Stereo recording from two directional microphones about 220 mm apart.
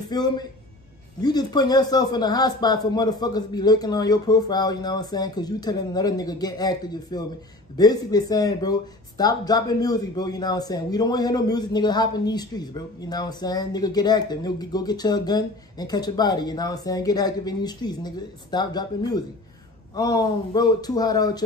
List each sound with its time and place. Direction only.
0.1 s speech: 20° left (ahead or behind)